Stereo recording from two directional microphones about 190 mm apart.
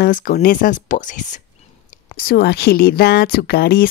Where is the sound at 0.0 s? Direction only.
50° left (ahead or behind).